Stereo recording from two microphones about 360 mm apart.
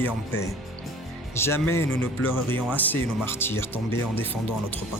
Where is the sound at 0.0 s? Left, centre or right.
Centre.